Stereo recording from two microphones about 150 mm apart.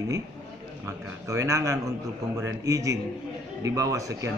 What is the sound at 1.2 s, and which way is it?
A man's voice, 20° right (ahead or behind).